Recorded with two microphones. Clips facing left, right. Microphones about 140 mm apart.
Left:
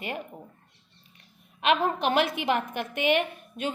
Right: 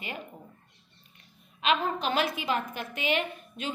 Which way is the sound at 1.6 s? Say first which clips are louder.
Left 3 dB; 60° left (ahead or behind).